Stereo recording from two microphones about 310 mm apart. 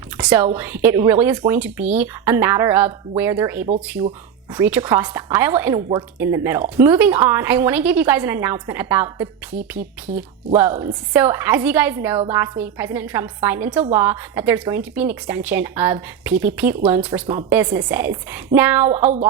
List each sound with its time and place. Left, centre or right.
0.2 s a woman's voice: centre